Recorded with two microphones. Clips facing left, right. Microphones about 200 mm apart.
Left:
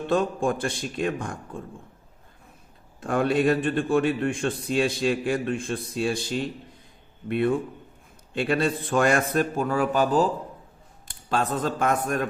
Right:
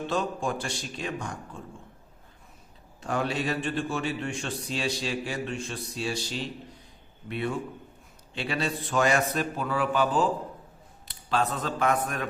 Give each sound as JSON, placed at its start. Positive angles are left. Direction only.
{"t": 0.1, "sound": "a man's voice", "side_deg": 55}
{"t": 3.0, "sound": "a man's voice", "side_deg": 50}